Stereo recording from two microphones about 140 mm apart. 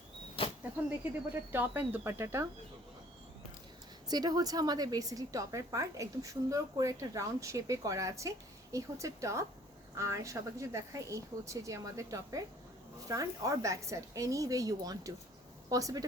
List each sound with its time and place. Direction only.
0.4 s vehicle: 40° left (ahead or behind)
1.5 s a woman's voice: 15° right (ahead or behind)
4.1 s a woman's voice: 30° right (ahead or behind)